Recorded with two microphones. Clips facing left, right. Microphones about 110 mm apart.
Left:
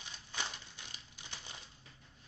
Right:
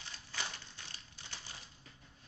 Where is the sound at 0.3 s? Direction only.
15° left (ahead or behind).